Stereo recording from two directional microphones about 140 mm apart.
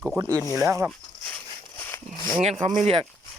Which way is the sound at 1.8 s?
15° left (ahead or behind).